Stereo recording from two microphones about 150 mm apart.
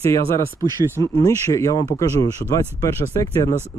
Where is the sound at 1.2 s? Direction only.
20° left (ahead or behind).